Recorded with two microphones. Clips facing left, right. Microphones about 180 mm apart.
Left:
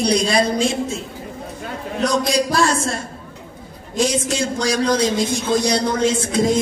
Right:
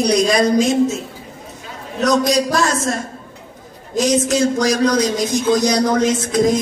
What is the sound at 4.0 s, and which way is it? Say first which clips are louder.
A woman's voice: right 4 dB; 30° left (ahead or behind).